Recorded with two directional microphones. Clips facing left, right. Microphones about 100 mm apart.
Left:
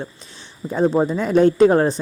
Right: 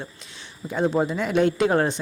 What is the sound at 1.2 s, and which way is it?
Speech, 40° left (ahead or behind).